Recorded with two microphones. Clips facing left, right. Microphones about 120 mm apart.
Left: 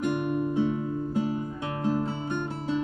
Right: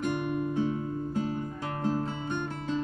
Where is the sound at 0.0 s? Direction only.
15° left (ahead or behind).